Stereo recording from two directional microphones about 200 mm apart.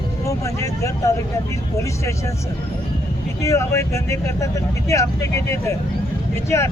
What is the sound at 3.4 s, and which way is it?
Speech, 15° left (ahead or behind).